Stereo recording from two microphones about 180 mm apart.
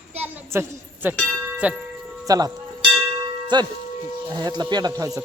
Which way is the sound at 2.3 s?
20° right (ahead or behind).